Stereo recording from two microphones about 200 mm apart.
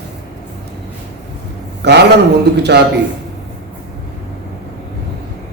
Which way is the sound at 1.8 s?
60° right (ahead or behind).